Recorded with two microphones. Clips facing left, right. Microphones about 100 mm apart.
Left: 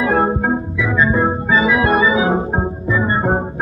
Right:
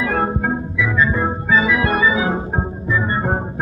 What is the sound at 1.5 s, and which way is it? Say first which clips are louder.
Organ: left 2 dB; 15° left (ahead or behind).